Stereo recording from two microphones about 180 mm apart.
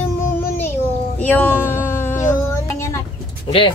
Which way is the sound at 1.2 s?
10° left (ahead or behind).